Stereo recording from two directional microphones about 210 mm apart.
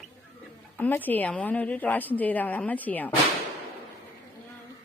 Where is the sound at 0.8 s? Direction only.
10° left (ahead or behind).